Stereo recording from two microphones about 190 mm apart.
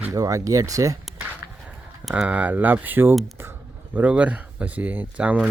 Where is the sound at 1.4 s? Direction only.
15° right (ahead or behind).